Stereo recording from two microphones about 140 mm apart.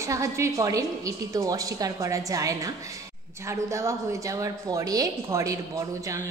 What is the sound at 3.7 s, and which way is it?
Speech, 20° right (ahead or behind).